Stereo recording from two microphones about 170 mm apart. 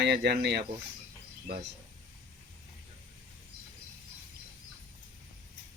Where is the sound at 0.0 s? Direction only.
75° right (ahead or behind).